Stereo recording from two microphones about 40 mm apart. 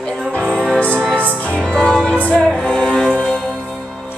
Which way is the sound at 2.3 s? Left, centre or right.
Left.